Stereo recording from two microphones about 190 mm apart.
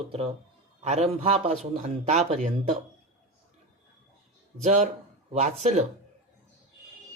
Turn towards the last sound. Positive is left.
turn(degrees=-35)  # may be behind; listen again after turning